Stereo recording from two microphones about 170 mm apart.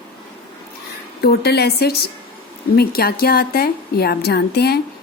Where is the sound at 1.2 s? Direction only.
70° left (ahead or behind).